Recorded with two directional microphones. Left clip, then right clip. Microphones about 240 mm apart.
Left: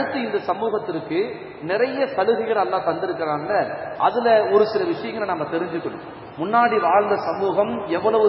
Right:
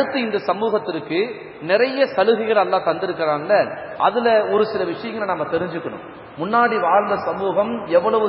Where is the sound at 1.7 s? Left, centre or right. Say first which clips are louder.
Right 4 dB; right.